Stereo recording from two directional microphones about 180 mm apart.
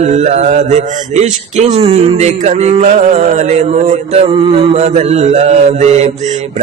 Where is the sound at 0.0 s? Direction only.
40° right (ahead or behind).